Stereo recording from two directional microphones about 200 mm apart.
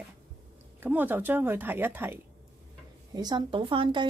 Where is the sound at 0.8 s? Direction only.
10° right (ahead or behind).